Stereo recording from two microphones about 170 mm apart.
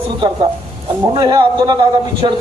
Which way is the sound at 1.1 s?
25° right (ahead or behind).